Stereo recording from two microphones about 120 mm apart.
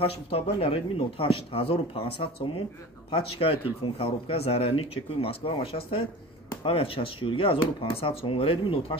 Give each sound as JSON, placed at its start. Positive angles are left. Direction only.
{"t": 0.3, "sound": "speech", "side_deg": 50}